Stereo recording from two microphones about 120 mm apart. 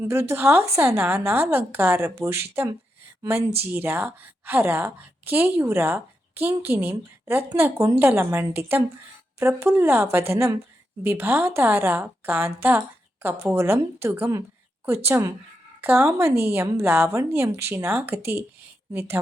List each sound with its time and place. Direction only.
0.1 s a woman's voice: 20° right (ahead or behind)